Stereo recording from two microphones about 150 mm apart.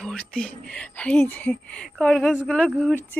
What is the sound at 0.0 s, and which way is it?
Speech, 5° left (ahead or behind).